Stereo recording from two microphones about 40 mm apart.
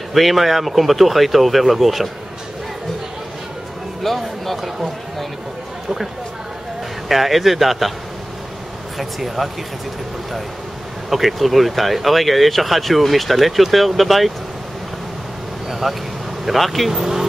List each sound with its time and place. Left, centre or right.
0.1 s speech: centre
4.0 s speech: centre
7.1 s speech: centre
8.9 s speech: centre
11.1 s speech: centre
15.7 s speech: centre
16.9 s speech: centre